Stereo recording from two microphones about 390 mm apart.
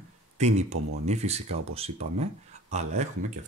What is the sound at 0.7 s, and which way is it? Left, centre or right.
Speech, right.